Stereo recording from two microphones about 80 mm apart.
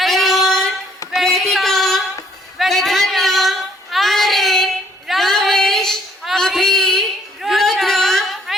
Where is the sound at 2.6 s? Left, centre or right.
Centre.